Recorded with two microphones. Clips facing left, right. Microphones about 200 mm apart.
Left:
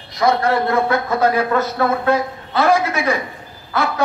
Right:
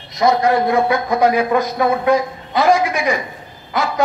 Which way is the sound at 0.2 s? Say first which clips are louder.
Right 2 dB; 15° right (ahead or behind).